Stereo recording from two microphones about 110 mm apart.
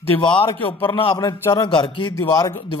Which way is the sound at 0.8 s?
50° left (ahead or behind).